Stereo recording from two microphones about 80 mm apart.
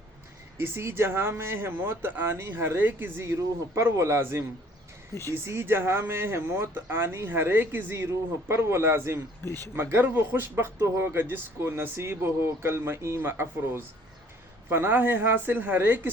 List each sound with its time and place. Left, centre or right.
0.6 s a man's voice: right
9.4 s speech: left
9.7 s a man's voice: right